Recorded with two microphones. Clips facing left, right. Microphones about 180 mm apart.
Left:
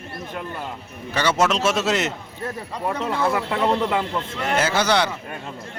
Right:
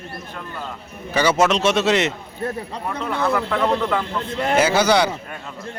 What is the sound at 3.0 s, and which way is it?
Speech, 25° left (ahead or behind).